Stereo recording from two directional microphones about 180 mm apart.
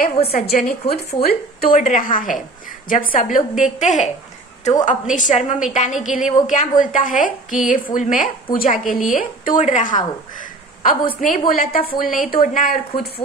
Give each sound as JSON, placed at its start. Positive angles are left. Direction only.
{"t": 0.0, "sound": "a woman's voice", "side_deg": 55}